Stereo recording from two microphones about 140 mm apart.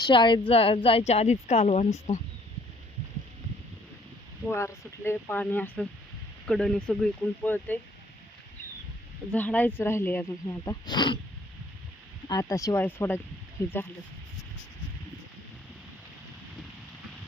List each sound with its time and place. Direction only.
0.0 s speech: 35° left (ahead or behind); by 2.1 s 55° left (ahead or behind)
4.4 s speech: 20° left (ahead or behind)
9.3 s speech: 10° left (ahead or behind); by 11.2 s 35° left (ahead or behind)
12.3 s speech: 25° left (ahead or behind)